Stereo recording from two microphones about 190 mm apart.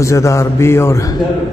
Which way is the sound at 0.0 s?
15° left (ahead or behind).